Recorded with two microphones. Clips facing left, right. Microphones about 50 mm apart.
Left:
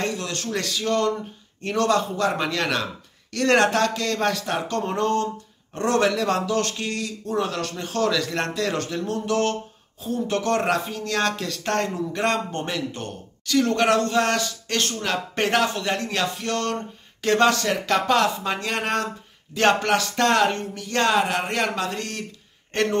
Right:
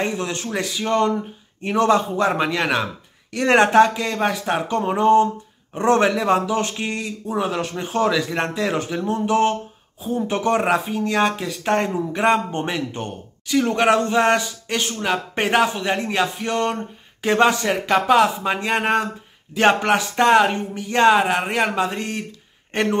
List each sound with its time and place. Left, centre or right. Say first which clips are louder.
0.0 s speech: right 3 dB; right